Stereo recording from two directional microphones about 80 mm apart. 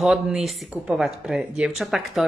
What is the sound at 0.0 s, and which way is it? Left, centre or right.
Speech, centre.